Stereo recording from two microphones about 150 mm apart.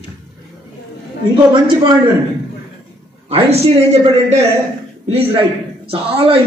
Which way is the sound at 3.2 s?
40° right (ahead or behind).